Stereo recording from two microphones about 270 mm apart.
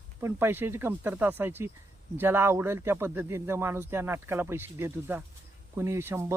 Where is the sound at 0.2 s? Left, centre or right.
Centre.